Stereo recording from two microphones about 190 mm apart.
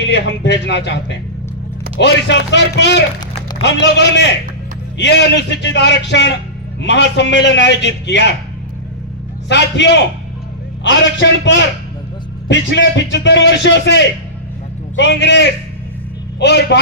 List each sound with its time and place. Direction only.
0.0 s a man's voice: 65° left (ahead or behind)
9.5 s a man's voice: 65° left (ahead or behind)
10.8 s a man's voice: 80° left